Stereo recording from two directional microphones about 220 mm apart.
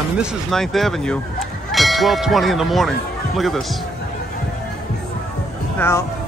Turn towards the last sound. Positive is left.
turn(degrees=10)  # may be behind; listen again after turning